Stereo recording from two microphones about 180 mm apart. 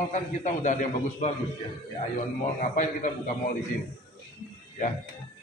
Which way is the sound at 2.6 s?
45° left (ahead or behind).